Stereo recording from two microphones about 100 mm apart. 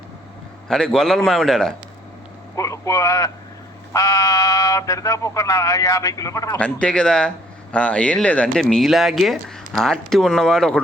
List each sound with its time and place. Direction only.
0.7 s a man's voice: 5° left (ahead or behind)
2.6 s a man's voice: 30° left (ahead or behind)
6.6 s speech: 10° left (ahead or behind)